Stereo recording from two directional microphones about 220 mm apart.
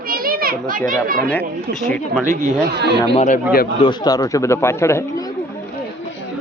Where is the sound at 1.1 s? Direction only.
40° right (ahead or behind).